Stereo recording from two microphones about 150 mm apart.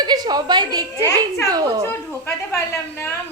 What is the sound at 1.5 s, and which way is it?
Speech, 25° right (ahead or behind).